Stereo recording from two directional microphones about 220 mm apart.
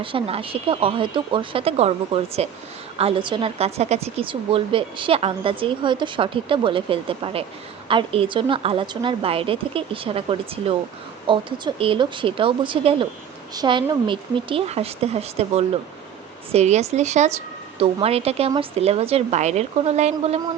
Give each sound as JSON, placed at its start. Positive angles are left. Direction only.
{"t": 0.0, "sound": "a woman's voice", "side_deg": -25}